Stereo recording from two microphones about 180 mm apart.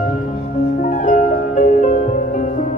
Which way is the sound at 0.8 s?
45° left (ahead or behind).